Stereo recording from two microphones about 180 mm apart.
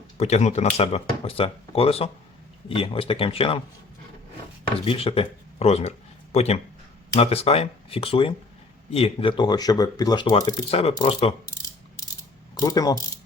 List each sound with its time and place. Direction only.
0.2 s speech: 35° left (ahead or behind)
4.9 s speech: 30° left (ahead or behind)
12.5 s speech: 20° left (ahead or behind)